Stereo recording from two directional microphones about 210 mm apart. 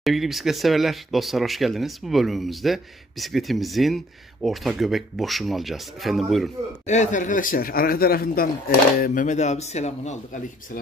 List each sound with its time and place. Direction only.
0.0 s speech: centre (ahead or behind)
6.9 s a man's voice: 35° left (ahead or behind)